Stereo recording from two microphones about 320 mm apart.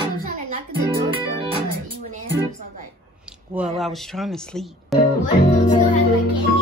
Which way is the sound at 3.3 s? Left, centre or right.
Centre.